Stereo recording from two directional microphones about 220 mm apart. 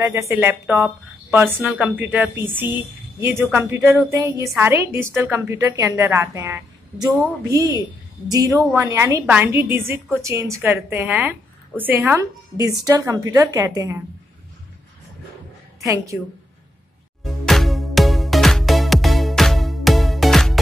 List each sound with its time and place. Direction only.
0.1 s a woman's voice: 10° right (ahead or behind)
15.8 s a woman's voice: 15° right (ahead or behind)
17.2 s music: centre (ahead or behind)